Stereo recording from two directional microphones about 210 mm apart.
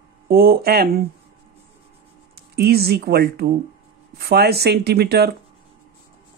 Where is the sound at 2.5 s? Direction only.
50° right (ahead or behind).